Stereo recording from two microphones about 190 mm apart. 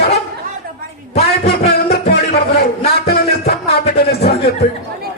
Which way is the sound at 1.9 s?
55° left (ahead or behind).